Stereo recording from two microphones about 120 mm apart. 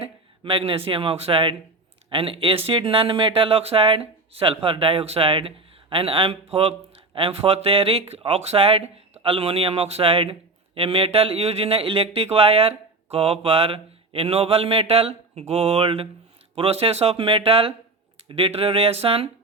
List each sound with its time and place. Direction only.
0.0 s speech: 50° right (ahead or behind)